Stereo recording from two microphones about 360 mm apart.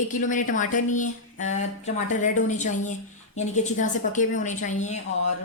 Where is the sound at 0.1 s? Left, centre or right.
Left.